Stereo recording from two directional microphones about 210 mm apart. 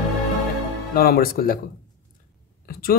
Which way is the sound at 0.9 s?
45° left (ahead or behind).